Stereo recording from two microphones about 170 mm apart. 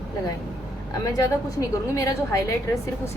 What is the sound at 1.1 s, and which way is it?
A woman's voice, 20° left (ahead or behind).